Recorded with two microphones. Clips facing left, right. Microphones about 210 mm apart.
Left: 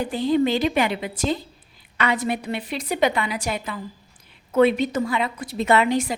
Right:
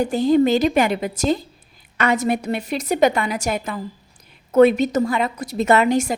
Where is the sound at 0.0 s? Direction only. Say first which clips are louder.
Right 4 dB; 45° right (ahead or behind).